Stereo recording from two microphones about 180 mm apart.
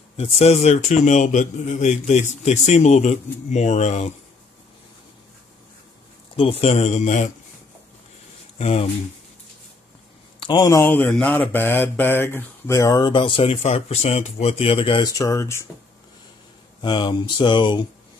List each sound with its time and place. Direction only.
0.2 s a man's voice: 35° left (ahead or behind)
6.3 s a man's voice: 35° left (ahead or behind)
8.5 s speech: 35° left (ahead or behind)
10.4 s mantra: 25° left (ahead or behind)
16.8 s mantra: 25° left (ahead or behind)